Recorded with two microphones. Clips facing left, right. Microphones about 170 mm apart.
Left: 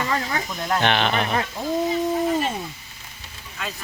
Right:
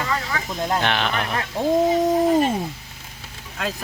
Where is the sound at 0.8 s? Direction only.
Centre (ahead or behind).